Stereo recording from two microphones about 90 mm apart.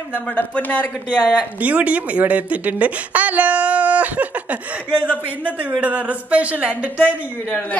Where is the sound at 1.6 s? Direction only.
15° right (ahead or behind).